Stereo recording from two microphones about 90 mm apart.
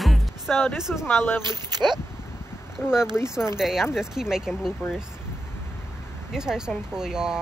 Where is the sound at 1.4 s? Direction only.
50° right (ahead or behind).